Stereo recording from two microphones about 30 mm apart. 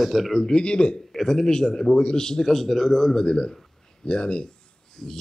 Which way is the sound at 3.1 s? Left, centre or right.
Left.